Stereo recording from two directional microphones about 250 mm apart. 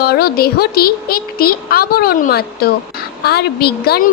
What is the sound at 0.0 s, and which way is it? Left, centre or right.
A woman's voice, left.